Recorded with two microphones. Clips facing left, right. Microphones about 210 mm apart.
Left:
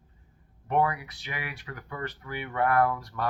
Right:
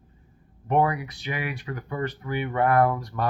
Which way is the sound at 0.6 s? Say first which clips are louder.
Right 4 dB; 20° right (ahead or behind).